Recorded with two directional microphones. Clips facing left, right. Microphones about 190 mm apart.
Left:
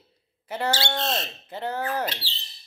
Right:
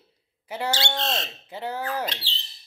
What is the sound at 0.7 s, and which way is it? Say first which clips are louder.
Speech: even; 5° left (ahead or behind).